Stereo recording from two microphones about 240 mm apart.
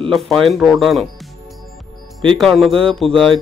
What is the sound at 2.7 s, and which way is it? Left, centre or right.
Speech, right.